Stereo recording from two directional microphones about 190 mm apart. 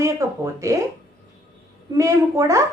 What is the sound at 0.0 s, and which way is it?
Speech, 15° right (ahead or behind).